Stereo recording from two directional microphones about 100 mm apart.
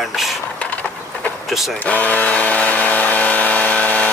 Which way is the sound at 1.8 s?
15° left (ahead or behind).